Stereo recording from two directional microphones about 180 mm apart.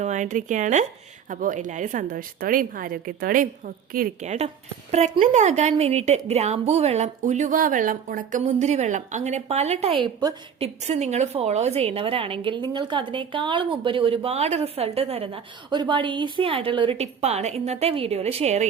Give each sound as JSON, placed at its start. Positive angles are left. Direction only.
{"t": 0.0, "sound": "a woman's voice", "side_deg": -40}